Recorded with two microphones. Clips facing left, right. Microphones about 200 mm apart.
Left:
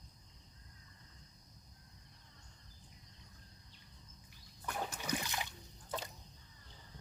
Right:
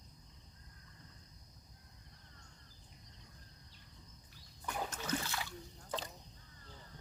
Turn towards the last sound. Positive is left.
turn(degrees=15)  # may be behind; listen again after turning